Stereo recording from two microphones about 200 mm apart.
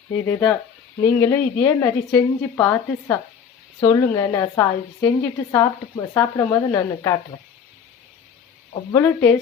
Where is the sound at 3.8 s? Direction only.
20° left (ahead or behind).